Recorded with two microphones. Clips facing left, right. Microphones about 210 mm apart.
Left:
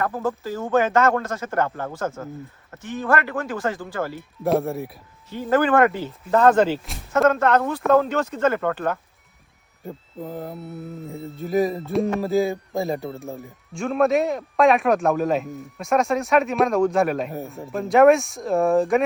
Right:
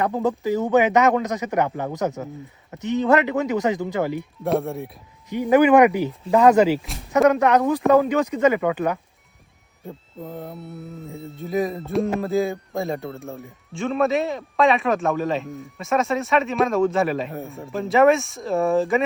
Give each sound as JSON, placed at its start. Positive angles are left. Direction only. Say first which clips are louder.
{"t": 0.0, "sound": "speech", "louder": "right 3 dB", "side_deg": -20}
{"t": 4.2, "sound": "speech", "louder": "left 1 dB", "side_deg": 0}
{"t": 5.3, "sound": "speech", "louder": "right 4 dB", "side_deg": -15}
{"t": 7.3, "sound": "speech", "louder": "right 2 dB", "side_deg": -15}
{"t": 9.8, "sound": "speech", "louder": "left 2 dB", "side_deg": 0}